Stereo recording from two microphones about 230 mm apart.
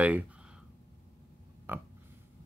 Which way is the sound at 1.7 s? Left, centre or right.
Centre.